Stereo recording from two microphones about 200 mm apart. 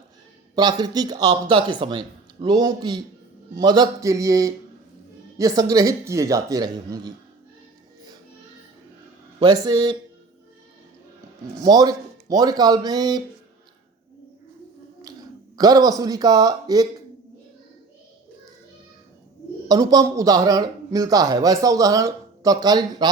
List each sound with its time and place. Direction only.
0.5 s a woman's voice: 20° right (ahead or behind)
9.4 s speech: 20° right (ahead or behind)
11.6 s speech: 20° right (ahead or behind)
15.5 s speech: 20° right (ahead or behind)
19.6 s speech: 20° right (ahead or behind)